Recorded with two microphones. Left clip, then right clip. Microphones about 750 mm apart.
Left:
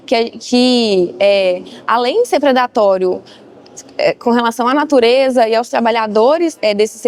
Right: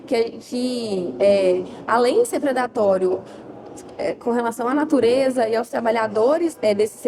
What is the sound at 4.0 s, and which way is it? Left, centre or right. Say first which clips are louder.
Speech: left 9 dB; left.